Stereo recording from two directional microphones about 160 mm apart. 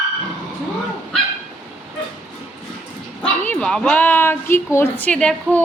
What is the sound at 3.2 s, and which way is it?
Speech, 5° left (ahead or behind).